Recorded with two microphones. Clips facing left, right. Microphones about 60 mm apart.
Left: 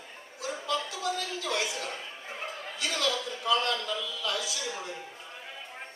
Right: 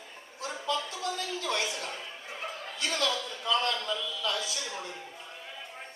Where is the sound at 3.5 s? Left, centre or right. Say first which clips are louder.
Left 1 dB; right.